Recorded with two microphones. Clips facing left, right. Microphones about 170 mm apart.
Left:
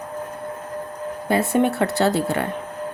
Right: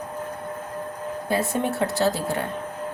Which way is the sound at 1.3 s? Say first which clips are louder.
Left 6 dB; 65° left (ahead or behind).